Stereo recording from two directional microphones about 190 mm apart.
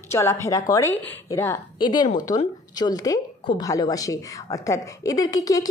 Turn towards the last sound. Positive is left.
turn(degrees=20)  # may be behind; listen again after turning